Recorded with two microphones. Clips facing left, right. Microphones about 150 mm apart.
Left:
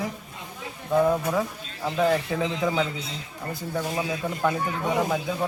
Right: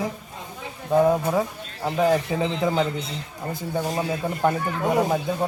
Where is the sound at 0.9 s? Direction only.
25° right (ahead or behind).